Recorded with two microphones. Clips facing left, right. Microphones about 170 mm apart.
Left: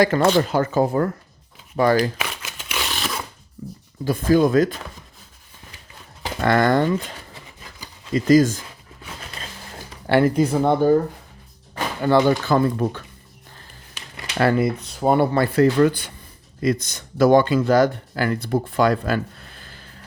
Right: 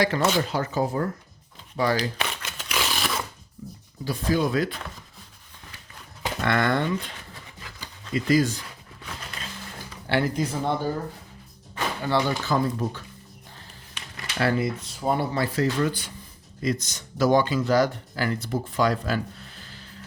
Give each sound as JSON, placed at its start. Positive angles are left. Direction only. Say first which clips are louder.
{"t": 0.0, "sound": "speech", "louder": "left 6 dB", "side_deg": 50}
{"t": 2.1, "sound": "shuffling cards", "louder": "left 1 dB", "side_deg": 5}
{"t": 4.0, "sound": "speech", "louder": "left 7 dB", "side_deg": 50}
{"t": 6.4, "sound": "speech", "louder": "left 6 dB", "side_deg": 40}
{"t": 8.1, "sound": "speech", "louder": "left 7 dB", "side_deg": 45}
{"t": 10.1, "sound": "speech", "louder": "left 8 dB", "side_deg": 55}
{"t": 12.0, "sound": "speech", "louder": "left 8 dB", "side_deg": 55}
{"t": 14.3, "sound": "speech", "louder": "left 6 dB", "side_deg": 55}